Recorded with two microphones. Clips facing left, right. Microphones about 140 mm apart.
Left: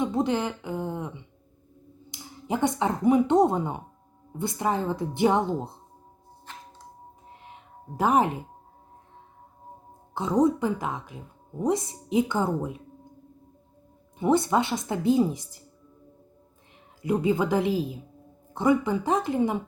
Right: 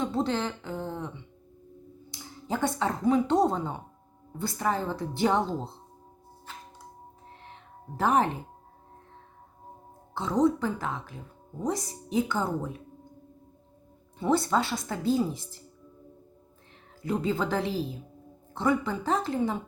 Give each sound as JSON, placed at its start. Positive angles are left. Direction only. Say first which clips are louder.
{"t": 0.0, "sound": "a woman's voice", "louder": "left 3 dB", "side_deg": 15}
{"t": 7.3, "sound": "music", "louder": "left 2 dB", "side_deg": 15}
{"t": 10.2, "sound": "a woman's voice", "louder": "left 2 dB", "side_deg": 20}
{"t": 14.2, "sound": "a woman's voice", "louder": "left 3 dB", "side_deg": 20}
{"t": 17.0, "sound": "speech", "louder": "left 4 dB", "side_deg": 15}